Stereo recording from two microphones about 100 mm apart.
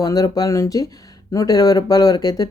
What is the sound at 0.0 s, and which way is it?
Speech, 40° left (ahead or behind).